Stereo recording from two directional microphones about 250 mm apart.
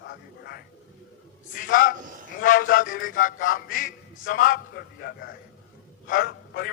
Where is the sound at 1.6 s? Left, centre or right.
Left.